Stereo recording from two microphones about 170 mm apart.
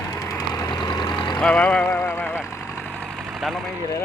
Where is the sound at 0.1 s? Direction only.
20° left (ahead or behind).